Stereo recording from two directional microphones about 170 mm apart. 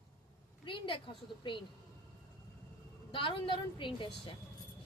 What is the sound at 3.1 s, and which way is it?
A woman's voice, 30° left (ahead or behind).